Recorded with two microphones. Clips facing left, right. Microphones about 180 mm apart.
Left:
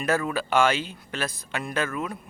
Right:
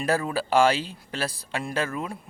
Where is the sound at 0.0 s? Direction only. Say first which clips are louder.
Even; 30° right (ahead or behind).